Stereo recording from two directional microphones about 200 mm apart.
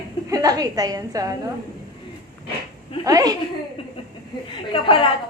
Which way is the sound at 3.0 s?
15° right (ahead or behind).